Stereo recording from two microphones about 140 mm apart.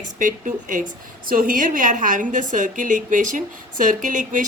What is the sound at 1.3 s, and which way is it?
A woman's voice, 85° right.